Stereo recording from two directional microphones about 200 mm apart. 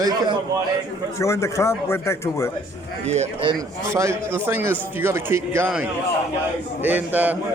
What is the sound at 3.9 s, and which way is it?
A man's voice, 15° right (ahead or behind).